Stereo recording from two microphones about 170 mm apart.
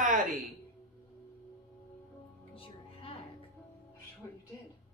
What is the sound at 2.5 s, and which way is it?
Music, 35° left (ahead or behind).